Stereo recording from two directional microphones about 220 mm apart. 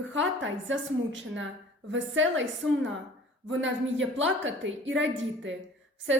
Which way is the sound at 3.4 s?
60° right (ahead or behind).